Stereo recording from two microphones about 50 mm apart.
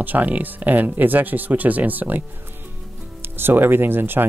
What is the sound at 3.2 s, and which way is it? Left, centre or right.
Speech, right.